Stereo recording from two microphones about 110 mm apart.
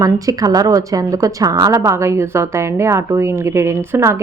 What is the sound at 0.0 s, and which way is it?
A woman's voice, 30° right (ahead or behind).